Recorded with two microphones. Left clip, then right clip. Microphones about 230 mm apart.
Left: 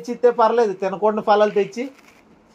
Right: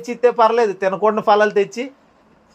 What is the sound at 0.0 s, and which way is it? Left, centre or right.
Speech, right.